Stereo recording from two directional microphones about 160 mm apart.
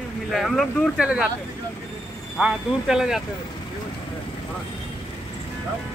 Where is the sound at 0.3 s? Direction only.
Centre (ahead or behind).